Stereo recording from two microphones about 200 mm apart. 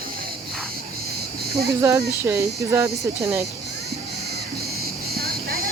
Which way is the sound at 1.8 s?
15° right (ahead or behind).